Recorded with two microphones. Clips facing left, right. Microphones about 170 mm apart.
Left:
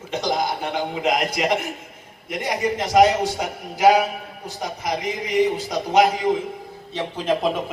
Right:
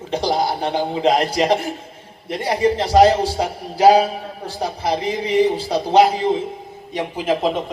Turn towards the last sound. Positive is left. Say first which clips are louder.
# right 2 dB
turn(degrees=0)  # may be behind; listen again after turning